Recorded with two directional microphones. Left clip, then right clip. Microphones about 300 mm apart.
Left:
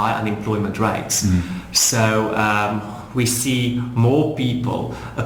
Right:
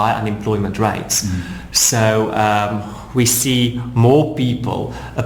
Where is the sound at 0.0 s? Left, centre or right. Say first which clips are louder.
Right 3 dB; right.